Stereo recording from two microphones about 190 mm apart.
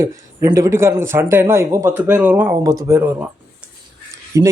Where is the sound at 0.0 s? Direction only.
15° right (ahead or behind).